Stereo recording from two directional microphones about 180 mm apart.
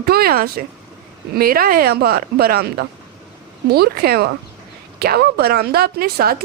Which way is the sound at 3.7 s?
60° right (ahead or behind).